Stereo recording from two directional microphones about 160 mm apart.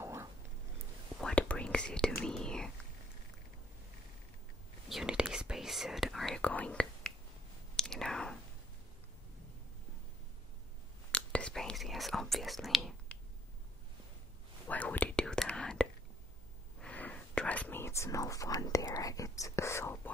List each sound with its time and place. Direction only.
0.0 s a sound: 15° right (ahead or behind)
1.2 s whispering: 5° left (ahead or behind)
4.8 s whispering: 5° right (ahead or behind)
11.1 s whispering: 5° left (ahead or behind)
14.7 s whispering: 10° left (ahead or behind)